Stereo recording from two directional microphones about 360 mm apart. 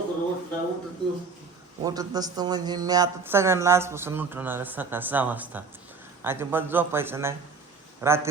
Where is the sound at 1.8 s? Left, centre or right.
Centre.